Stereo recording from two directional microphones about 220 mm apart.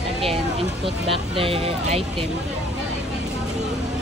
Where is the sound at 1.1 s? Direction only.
25° right (ahead or behind).